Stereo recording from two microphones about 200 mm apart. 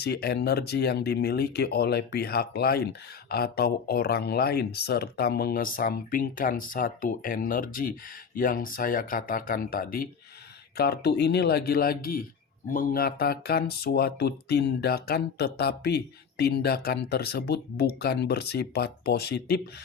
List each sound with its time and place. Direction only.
0.0 s speech: 50° left (ahead or behind)